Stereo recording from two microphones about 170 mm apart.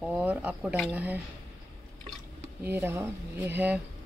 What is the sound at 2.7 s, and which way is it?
Speech, 10° right (ahead or behind).